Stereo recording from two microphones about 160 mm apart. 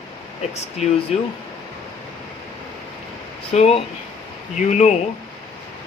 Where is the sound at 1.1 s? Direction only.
40° left (ahead or behind).